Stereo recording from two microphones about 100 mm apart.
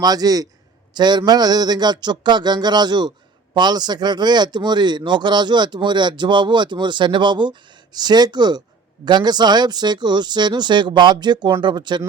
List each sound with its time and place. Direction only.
0.0 s a man's voice: 40° right (ahead or behind)